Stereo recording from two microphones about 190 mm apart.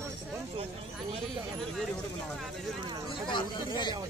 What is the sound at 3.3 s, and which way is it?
Speech, 25° left (ahead or behind).